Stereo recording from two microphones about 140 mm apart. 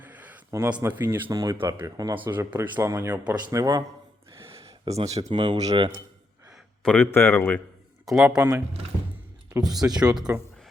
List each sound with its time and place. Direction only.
0.0 s a sound: 10° right (ahead or behind)
1.3 s speech: 25° right (ahead or behind)
2.1 s speech: 15° right (ahead or behind)
4.9 s speech: 50° right (ahead or behind)
5.3 s speech: 35° right (ahead or behind)
6.5 s speech: 10° left (ahead or behind)
8.0 s speech: centre (ahead or behind)
8.4 s speech: 15° right (ahead or behind)
10.0 s speech: 5° right (ahead or behind)